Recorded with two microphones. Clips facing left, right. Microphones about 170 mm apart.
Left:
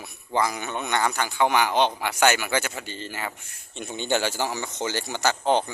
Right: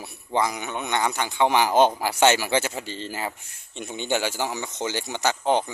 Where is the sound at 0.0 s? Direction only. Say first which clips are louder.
Right 1 dB; 20° right (ahead or behind).